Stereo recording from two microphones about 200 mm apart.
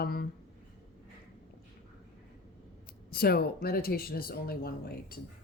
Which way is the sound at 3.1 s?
50° left (ahead or behind).